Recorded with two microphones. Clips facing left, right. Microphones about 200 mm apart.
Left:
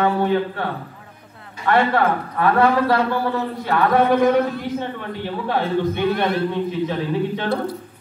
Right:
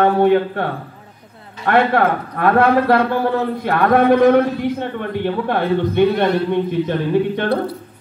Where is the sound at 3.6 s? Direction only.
55° right (ahead or behind).